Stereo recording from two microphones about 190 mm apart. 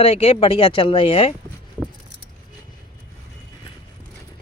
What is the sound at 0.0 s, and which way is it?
Speech, 30° left (ahead or behind).